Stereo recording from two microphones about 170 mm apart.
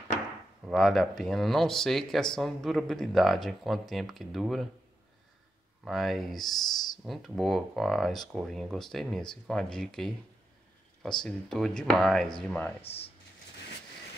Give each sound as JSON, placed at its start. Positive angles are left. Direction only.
{"t": 0.7, "sound": "speech", "side_deg": 0}
{"t": 5.9, "sound": "speech", "side_deg": 0}
{"t": 12.8, "sound": "speech", "side_deg": 35}